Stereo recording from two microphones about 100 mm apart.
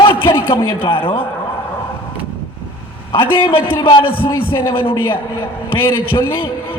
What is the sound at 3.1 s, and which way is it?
A man's voice, 60° left (ahead or behind).